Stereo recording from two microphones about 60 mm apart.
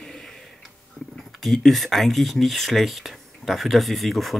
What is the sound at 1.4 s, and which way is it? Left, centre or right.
Speech, centre.